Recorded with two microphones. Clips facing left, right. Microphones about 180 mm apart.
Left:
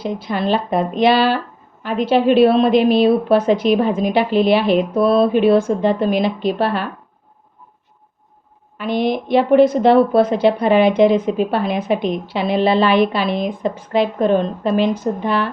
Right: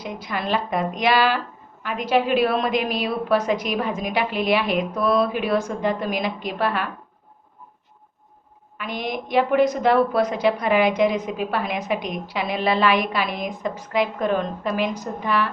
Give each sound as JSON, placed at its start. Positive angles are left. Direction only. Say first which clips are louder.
{"t": 0.0, "sound": "speech", "louder": "left 7 dB", "side_deg": 30}
{"t": 8.8, "sound": "speech", "louder": "left 9 dB", "side_deg": 30}